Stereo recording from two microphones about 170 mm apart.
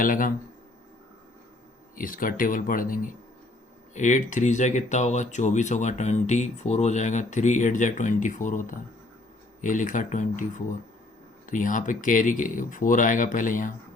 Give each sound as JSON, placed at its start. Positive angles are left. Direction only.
{"t": 0.0, "sound": "speech", "side_deg": 55}
{"t": 2.0, "sound": "speech", "side_deg": 55}
{"t": 11.4, "sound": "speech", "side_deg": 50}